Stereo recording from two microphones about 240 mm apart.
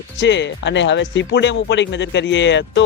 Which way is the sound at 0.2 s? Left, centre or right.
Left.